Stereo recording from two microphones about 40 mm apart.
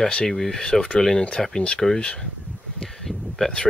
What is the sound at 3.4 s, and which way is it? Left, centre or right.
Speech, centre.